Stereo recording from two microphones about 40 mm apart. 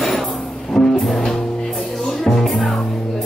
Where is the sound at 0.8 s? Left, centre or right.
Centre.